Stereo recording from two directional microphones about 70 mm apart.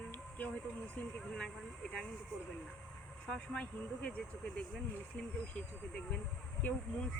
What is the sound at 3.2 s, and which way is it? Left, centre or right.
Speech, centre.